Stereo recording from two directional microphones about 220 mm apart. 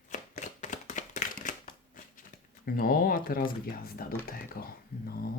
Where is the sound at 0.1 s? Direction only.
35° left (ahead or behind).